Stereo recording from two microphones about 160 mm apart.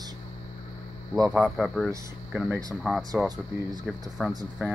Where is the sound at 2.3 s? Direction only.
10° right (ahead or behind).